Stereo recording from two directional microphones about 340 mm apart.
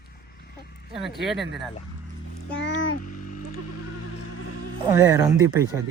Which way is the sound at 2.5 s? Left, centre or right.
Left.